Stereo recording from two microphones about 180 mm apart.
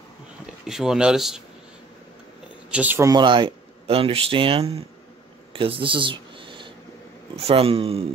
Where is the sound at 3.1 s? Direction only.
25° right (ahead or behind).